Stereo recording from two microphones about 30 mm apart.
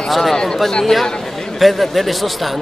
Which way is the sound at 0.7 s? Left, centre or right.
Centre.